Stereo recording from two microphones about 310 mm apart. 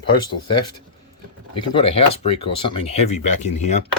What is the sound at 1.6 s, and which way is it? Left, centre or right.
Speech, centre.